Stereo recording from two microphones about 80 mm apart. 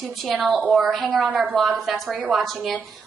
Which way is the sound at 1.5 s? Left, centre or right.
Centre.